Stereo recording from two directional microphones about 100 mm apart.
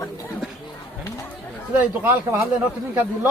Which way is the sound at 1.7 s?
20° right (ahead or behind).